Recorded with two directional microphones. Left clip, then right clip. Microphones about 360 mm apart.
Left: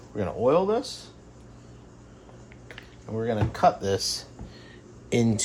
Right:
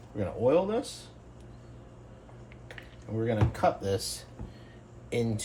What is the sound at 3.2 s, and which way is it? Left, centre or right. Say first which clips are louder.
Speech: left 4 dB; centre.